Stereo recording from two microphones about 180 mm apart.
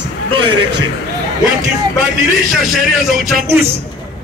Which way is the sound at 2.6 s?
Centre (ahead or behind).